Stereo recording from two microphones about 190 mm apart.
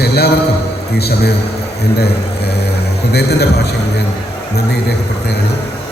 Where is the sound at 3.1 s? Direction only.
60° left (ahead or behind).